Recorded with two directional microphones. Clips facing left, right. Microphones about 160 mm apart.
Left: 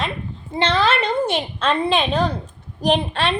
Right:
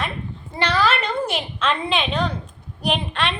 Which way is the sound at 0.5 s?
25° left (ahead or behind).